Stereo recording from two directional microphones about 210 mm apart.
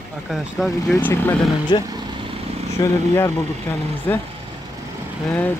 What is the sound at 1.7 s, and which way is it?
Speech, 20° left (ahead or behind).